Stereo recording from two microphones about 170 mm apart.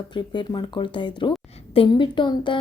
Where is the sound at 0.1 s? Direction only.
25° left (ahead or behind).